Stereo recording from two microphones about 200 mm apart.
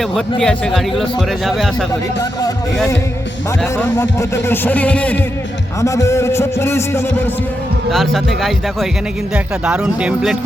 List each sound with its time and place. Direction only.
0.0 s speech: 5° left (ahead or behind)
2.7 s a man's voice: 5° left (ahead or behind)
7.9 s speech: centre (ahead or behind)